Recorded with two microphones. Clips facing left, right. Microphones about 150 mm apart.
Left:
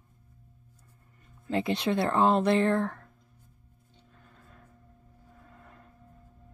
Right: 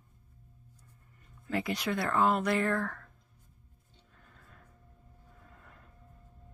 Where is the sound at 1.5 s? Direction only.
25° left (ahead or behind).